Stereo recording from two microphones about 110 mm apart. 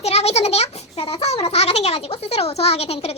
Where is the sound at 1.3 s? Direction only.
65° left (ahead or behind).